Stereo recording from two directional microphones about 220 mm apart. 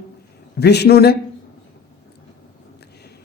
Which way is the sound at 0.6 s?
50° left (ahead or behind).